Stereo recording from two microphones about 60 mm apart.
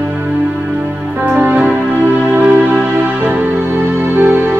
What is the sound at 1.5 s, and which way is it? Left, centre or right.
Music, centre.